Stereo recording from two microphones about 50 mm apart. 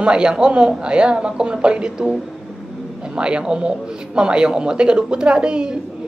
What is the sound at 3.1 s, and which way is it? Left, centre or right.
A woman's voice, centre.